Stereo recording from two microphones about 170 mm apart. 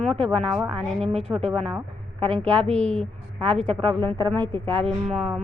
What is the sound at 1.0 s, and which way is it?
Speech, 40° right (ahead or behind).